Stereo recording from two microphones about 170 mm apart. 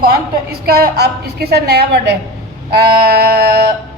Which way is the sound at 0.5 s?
65° right (ahead or behind).